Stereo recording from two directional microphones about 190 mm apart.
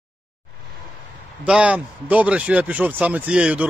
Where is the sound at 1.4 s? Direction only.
5° right (ahead or behind).